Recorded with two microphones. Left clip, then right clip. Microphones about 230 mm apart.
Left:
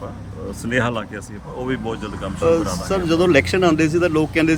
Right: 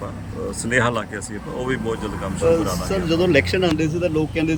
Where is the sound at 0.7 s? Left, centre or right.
Centre.